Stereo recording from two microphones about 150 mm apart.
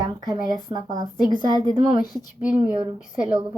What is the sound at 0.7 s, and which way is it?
Speech, 35° right (ahead or behind).